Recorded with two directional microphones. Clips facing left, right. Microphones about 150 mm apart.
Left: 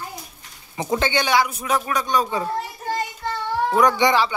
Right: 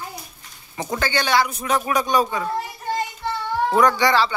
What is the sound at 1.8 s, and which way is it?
Speech, 10° right (ahead or behind).